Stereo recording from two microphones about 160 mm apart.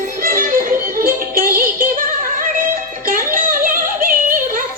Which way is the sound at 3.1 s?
60° right (ahead or behind).